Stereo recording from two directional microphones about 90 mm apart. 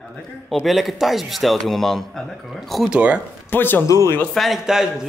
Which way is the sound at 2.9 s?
15° right (ahead or behind).